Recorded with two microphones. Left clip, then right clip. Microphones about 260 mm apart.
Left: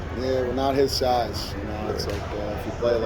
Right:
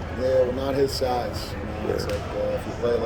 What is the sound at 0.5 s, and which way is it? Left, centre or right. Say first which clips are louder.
Speech: left 2 dB; centre.